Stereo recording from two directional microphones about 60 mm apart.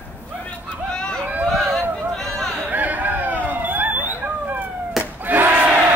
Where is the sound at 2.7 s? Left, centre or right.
Right.